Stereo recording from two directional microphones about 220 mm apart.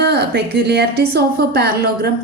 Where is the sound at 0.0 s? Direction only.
50° right (ahead or behind).